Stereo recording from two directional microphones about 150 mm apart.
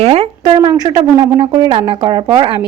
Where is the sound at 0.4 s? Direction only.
30° right (ahead or behind).